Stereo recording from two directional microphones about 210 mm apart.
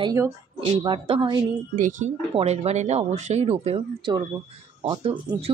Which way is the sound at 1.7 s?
40° right (ahead or behind).